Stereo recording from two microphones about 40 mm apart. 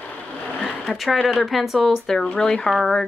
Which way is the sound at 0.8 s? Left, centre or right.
Centre.